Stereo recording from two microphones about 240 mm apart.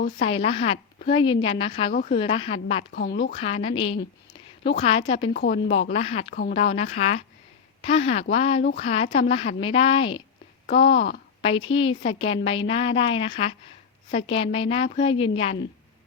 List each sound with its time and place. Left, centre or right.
0.2 s a woman's voice: left
1.9 s speech: left
2.1 s a woman's voice: left
2.9 s speech: left
3.3 s a woman's voice: left
5.3 s speech: left
5.9 s a woman's voice: left
11.4 s a woman's voice: left